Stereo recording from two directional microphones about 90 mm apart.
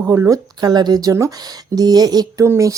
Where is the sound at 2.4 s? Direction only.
35° right (ahead or behind).